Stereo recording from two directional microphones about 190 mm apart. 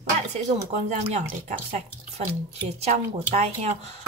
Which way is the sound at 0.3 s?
35° right (ahead or behind).